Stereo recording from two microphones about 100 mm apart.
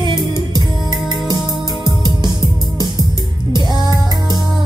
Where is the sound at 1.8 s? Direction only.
45° right (ahead or behind).